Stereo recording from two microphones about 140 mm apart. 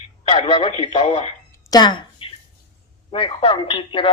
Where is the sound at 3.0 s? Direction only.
40° left (ahead or behind).